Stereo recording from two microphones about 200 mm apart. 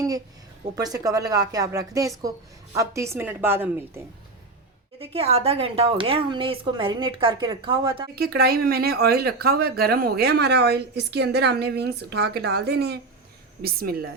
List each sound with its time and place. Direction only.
0.8 s speech: 20° right (ahead or behind)
4.9 s a woman's voice: 30° right (ahead or behind)
8.1 s speech: 50° right (ahead or behind)